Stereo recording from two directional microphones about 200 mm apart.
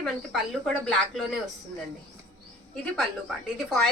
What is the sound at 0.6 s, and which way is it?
Speech, centre (ahead or behind).